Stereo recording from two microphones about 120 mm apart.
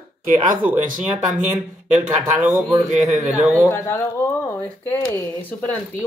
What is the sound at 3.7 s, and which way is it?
Speech, 20° left (ahead or behind).